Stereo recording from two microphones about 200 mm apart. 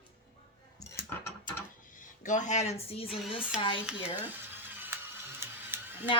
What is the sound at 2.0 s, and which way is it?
Speech, 40° left (ahead or behind).